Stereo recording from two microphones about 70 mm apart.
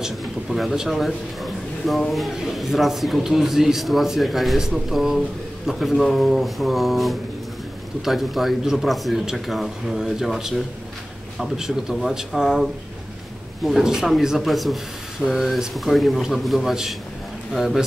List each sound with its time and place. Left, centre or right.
0.0 s a man's voice: centre
13.7 s a man's voice: centre